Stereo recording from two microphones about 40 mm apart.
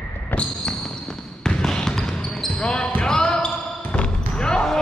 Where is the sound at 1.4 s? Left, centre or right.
Centre.